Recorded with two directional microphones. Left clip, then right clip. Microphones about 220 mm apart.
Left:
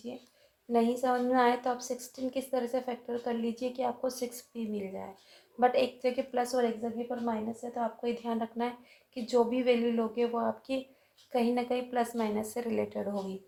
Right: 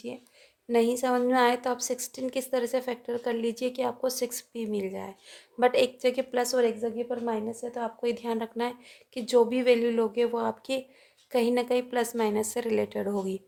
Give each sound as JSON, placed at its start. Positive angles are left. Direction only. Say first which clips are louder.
{"t": 0.7, "sound": "a woman's voice", "louder": "right 3 dB", "side_deg": -45}